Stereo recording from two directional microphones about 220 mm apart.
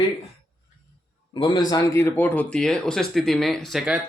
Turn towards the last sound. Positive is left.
turn(degrees=-5)  # may be behind; listen again after turning